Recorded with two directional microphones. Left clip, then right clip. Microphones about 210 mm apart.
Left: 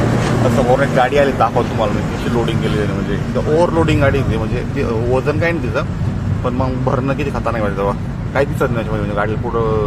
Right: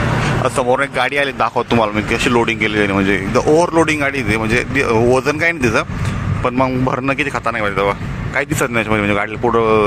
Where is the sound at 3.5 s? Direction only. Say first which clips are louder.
Right 1 dB; 25° right (ahead or behind).